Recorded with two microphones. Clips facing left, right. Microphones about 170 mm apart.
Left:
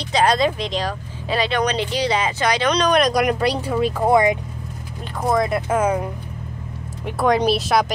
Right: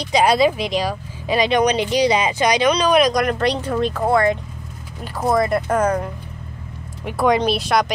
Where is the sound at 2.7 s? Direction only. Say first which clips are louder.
Right 2 dB; 5° right (ahead or behind).